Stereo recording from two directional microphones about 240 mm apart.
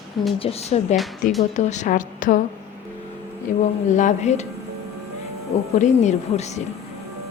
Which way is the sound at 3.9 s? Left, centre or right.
Left.